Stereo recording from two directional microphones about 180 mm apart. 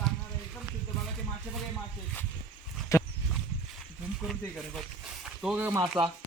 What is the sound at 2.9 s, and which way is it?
Horse, 15° left (ahead or behind).